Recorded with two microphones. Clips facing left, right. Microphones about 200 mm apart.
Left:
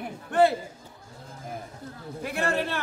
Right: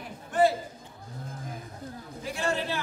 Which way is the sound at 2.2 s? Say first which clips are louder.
Left 2 dB; 60° left (ahead or behind).